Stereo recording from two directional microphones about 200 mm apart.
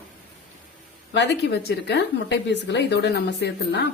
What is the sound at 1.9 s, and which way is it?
A woman's voice, 60° left (ahead or behind).